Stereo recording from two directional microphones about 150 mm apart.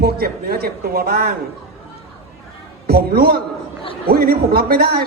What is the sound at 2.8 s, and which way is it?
A man's voice, 90° right.